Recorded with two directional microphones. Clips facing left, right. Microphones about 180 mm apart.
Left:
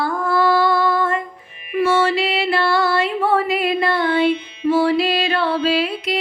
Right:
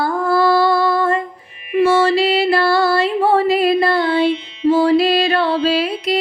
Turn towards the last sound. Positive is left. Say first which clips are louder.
# right 2 dB
turn(degrees=-40)  # may be behind; listen again after turning